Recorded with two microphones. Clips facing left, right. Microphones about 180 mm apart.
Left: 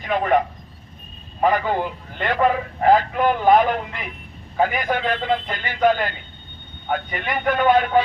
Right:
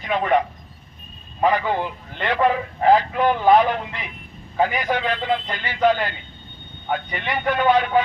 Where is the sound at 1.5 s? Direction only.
50° left (ahead or behind).